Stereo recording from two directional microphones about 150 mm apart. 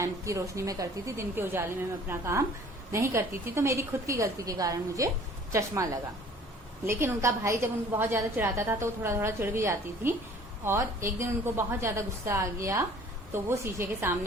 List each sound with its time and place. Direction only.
0.0 s a woman's voice: 20° right (ahead or behind)